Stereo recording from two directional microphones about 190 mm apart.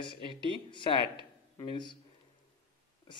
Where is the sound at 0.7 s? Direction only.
25° left (ahead or behind).